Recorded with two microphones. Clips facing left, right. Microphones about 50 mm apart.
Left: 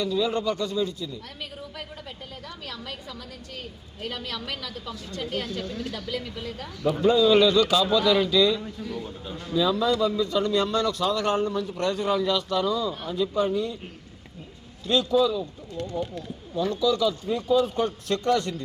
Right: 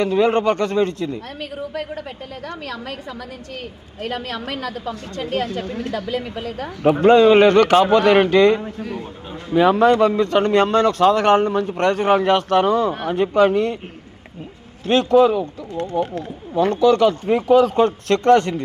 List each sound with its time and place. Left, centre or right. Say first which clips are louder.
0.0 s a man's voice: right 9 dB; right
8.8 s a man's voice: right 5 dB; right
9.6 s a man's voice: right 9 dB; right
14.8 s a man's voice: right 8 dB; right
15.7 s a man's voice: right 7 dB; right
16.0 s speech: right 9 dB; right